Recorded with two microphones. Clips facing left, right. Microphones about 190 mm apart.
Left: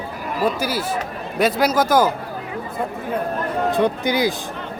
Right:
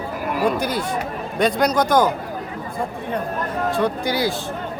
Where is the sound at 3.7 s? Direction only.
20° left (ahead or behind).